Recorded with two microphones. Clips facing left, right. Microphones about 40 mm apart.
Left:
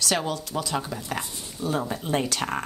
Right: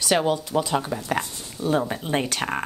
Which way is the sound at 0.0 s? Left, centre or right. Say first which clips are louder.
Right 5 dB; centre.